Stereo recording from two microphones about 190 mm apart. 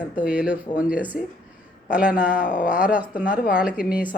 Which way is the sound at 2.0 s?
45° left (ahead or behind).